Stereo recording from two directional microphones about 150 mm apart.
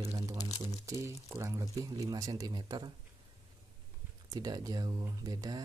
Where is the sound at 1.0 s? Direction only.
20° right (ahead or behind).